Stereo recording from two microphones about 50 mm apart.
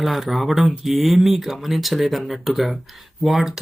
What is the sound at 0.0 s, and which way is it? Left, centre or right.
Speech, centre.